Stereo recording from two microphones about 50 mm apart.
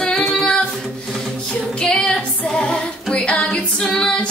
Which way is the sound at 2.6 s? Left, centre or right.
Centre.